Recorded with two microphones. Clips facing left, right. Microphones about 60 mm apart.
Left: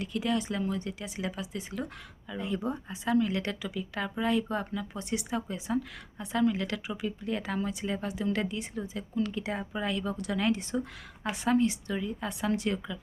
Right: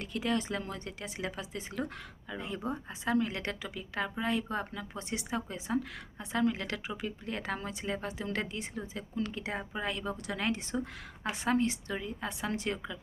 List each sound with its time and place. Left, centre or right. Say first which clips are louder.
0.0 s speech: left 2 dB; right